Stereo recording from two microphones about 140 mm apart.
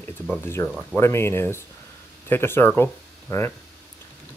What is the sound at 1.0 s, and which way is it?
Speech, 20° left (ahead or behind).